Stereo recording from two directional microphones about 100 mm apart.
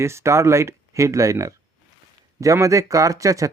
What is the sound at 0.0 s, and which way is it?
Speech, 30° right (ahead or behind).